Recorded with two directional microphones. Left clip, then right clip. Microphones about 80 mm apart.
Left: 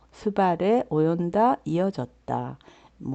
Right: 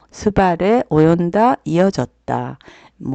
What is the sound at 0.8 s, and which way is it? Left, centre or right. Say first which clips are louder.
Speech: right 10 dB; right.